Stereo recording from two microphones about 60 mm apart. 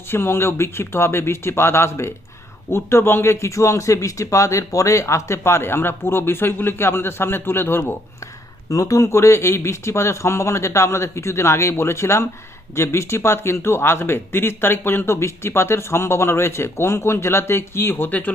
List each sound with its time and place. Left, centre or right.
0.1 s speech: left
8.7 s speech: left
18.1 s speech: left